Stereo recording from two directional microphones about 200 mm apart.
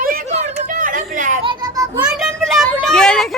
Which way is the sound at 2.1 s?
Centre (ahead or behind).